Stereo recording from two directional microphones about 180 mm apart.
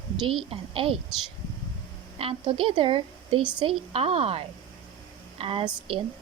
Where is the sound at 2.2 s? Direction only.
30° right (ahead or behind).